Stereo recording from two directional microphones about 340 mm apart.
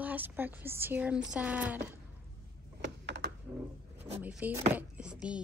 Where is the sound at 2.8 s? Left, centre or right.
Right.